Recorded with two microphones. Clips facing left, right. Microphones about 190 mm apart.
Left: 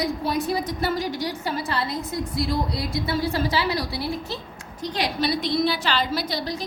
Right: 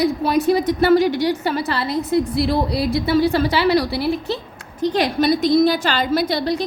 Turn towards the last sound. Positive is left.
turn(degrees=-65)  # may be behind; listen again after turning